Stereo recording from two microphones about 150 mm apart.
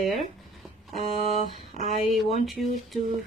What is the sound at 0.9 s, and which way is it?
Speech, 45° right (ahead or behind).